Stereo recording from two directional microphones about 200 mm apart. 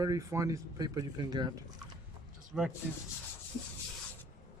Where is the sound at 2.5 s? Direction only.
Centre (ahead or behind).